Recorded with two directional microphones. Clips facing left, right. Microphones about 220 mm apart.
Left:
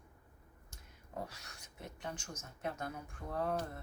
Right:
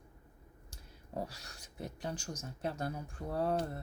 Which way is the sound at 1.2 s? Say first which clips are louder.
Right 4 dB; 35° right (ahead or behind).